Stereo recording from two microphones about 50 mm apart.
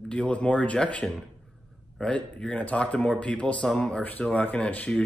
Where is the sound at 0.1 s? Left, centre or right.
Left.